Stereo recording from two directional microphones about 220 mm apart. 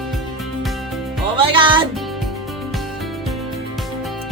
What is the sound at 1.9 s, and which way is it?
Music, centre (ahead or behind).